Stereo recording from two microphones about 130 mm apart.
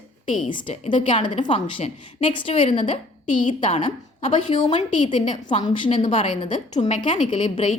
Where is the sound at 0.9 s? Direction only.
40° left (ahead or behind).